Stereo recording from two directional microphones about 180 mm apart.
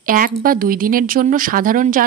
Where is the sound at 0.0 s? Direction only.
50° right (ahead or behind).